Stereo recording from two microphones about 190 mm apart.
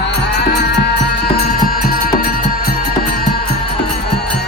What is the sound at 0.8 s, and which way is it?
Music, 55° left (ahead or behind).